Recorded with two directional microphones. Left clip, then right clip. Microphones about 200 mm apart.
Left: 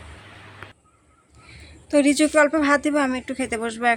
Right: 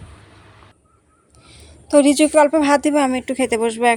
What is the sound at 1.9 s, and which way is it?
A woman's voice, 15° right (ahead or behind).